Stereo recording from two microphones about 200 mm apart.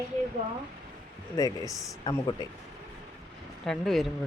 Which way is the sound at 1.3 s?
15° left (ahead or behind).